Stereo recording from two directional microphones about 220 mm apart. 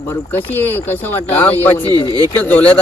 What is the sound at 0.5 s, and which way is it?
Speech, 10° left (ahead or behind).